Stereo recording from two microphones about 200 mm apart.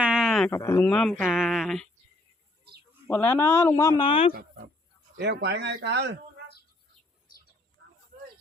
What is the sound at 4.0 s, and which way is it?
Speech, 25° left (ahead or behind).